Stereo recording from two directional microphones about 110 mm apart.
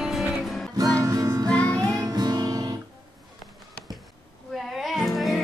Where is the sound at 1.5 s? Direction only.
10° left (ahead or behind).